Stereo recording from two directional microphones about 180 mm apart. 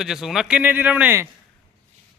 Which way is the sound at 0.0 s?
Centre (ahead or behind).